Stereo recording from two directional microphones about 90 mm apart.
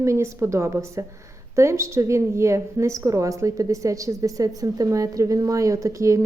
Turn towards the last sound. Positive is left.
turn(degrees=-35)  # may be behind; listen again after turning